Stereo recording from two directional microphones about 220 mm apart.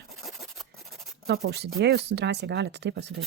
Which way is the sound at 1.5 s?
50° right (ahead or behind).